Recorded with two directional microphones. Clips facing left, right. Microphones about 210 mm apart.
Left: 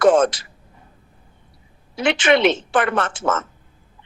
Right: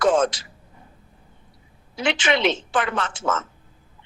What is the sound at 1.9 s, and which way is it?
A woman's voice, 65° left (ahead or behind).